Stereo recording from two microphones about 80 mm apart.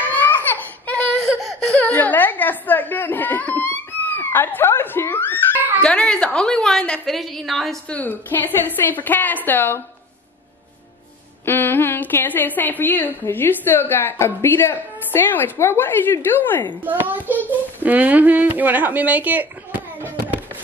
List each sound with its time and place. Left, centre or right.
0.1 s baby cry: left
1.8 s a sound: left
5.8 s a woman's voice: centre
7.9 s a woman's voice: left
11.4 s a woman's voice: left
16.8 s speech: right